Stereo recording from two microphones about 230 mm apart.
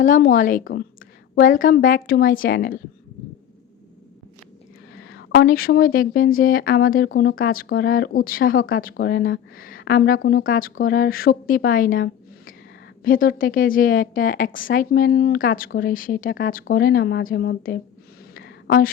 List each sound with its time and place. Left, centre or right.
0.0 s a woman's voice: left
4.9 s a woman's voice: left
7.1 s a woman's voice: left
18.3 s a sound: left